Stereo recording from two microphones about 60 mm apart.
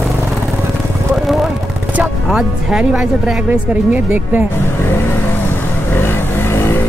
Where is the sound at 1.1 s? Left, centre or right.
Centre.